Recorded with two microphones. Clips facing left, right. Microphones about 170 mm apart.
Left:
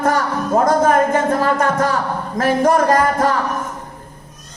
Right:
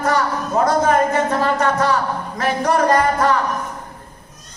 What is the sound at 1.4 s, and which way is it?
A man's voice, 50° left (ahead or behind).